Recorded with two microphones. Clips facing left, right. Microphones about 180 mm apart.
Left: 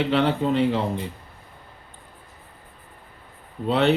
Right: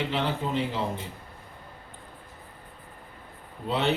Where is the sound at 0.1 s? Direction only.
65° left (ahead or behind).